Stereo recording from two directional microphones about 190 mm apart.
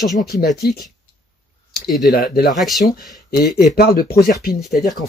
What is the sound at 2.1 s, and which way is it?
Speech, 55° left (ahead or behind).